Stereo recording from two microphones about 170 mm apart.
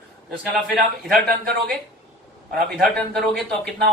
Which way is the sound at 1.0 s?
60° right (ahead or behind).